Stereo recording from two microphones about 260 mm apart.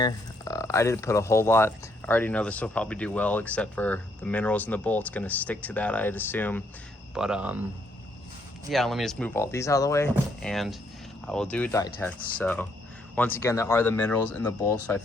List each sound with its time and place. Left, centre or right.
0.0 s speech: centre
8.7 s speech: centre